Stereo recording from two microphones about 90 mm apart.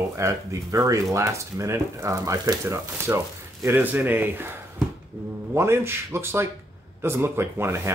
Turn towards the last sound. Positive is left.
turn(degrees=-30)  # may be behind; listen again after turning